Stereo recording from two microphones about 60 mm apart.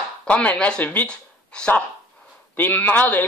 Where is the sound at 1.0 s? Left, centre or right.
Centre.